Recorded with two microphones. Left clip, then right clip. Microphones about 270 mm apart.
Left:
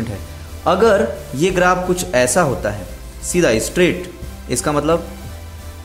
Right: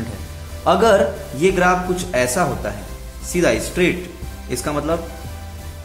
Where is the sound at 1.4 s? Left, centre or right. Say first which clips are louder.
Left 1 dB; left.